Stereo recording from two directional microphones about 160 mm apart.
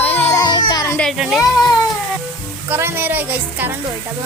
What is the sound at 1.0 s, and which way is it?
Speech, centre (ahead or behind).